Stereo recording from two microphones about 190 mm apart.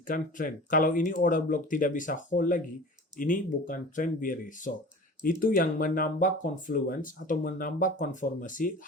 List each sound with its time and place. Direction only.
0.1 s speech: 45° left (ahead or behind)